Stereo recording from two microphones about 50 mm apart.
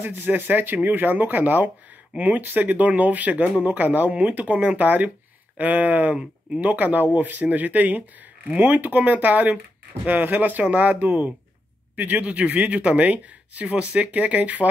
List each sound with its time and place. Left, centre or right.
0.0 s speech: right
4.1 s speech: right